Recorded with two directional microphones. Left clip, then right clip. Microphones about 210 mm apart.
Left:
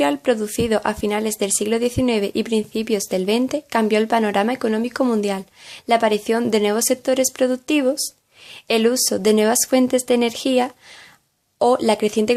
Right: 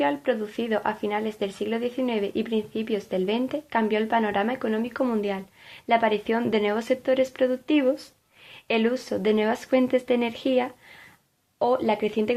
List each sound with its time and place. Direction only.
0.0 s speech: 35° left (ahead or behind)